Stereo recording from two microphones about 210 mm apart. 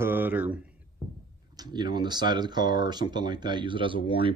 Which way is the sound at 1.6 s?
20° right (ahead or behind).